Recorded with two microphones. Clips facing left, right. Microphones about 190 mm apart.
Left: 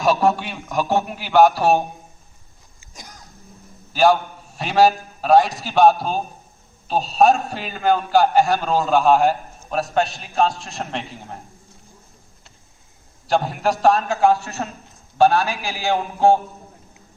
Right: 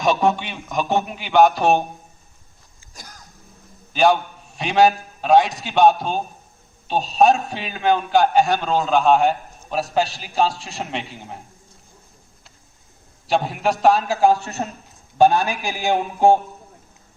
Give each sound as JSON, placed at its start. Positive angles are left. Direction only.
{"t": 0.0, "sound": "a man's voice", "side_deg": 0}
{"t": 3.9, "sound": "a man's voice", "side_deg": 0}
{"t": 13.2, "sound": "a man's voice", "side_deg": 0}
{"t": 14.3, "sound": "a man's voice", "side_deg": -15}